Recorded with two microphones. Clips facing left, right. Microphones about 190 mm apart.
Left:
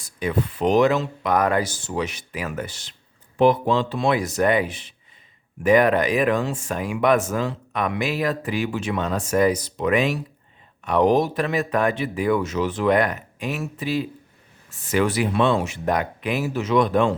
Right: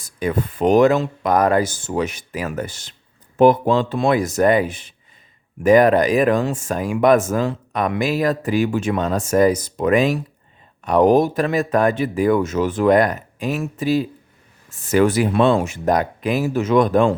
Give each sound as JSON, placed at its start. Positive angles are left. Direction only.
{"t": 0.0, "sound": "speech", "side_deg": -45}